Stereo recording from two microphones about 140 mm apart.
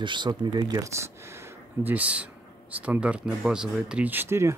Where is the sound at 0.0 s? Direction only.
35° right (ahead or behind).